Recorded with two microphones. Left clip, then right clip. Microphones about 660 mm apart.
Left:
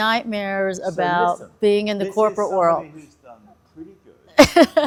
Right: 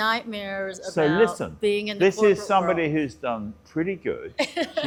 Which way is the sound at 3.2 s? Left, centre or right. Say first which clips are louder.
Right 16 dB; right.